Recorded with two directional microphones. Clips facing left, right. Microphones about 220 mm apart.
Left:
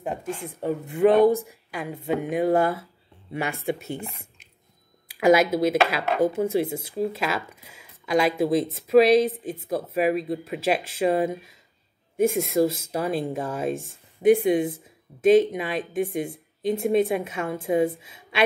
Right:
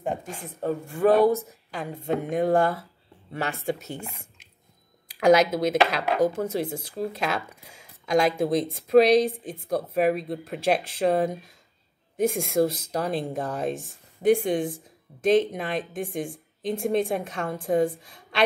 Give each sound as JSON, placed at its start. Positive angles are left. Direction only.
{"t": 0.0, "sound": "a woman's voice", "side_deg": 5}
{"t": 0.6, "sound": "a woman's voice", "side_deg": 20}
{"t": 5.2, "sound": "speech", "side_deg": 5}
{"t": 7.6, "sound": "speech", "side_deg": -45}
{"t": 8.0, "sound": "a woman's voice", "side_deg": 5}